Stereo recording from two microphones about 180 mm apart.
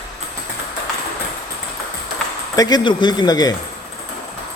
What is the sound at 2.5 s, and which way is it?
Speech, 20° left (ahead or behind).